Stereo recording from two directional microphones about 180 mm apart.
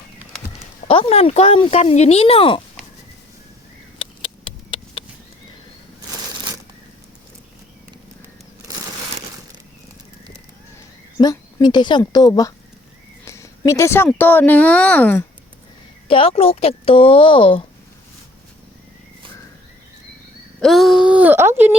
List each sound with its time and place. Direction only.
0.9 s speech: 30° left (ahead or behind)
3.9 s a sound: 30° left (ahead or behind)
11.2 s speech: 20° left (ahead or behind)
16.0 s speech: 30° left (ahead or behind)
20.6 s speech: centre (ahead or behind)